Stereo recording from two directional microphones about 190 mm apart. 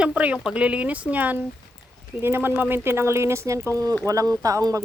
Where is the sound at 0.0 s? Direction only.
5° right (ahead or behind).